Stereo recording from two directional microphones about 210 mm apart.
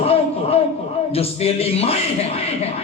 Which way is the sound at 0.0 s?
30° left (ahead or behind).